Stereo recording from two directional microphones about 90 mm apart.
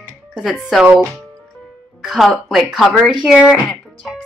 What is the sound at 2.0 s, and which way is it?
A woman's voice, centre (ahead or behind).